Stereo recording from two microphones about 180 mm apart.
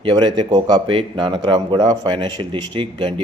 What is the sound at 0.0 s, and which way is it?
A man's voice, 25° right (ahead or behind).